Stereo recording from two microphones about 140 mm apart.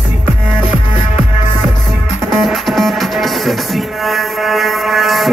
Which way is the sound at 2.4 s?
Centre (ahead or behind).